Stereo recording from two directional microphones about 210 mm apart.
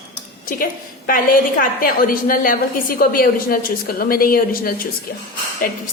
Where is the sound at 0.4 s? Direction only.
40° left (ahead or behind).